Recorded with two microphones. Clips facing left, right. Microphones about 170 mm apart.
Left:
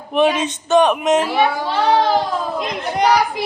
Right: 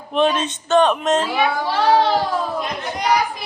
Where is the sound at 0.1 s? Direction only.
10° left (ahead or behind).